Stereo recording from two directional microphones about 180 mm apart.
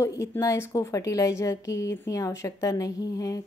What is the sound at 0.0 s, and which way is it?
Speech, 15° left (ahead or behind).